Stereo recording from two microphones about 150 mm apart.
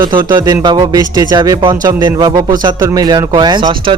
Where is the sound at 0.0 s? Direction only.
30° right (ahead or behind).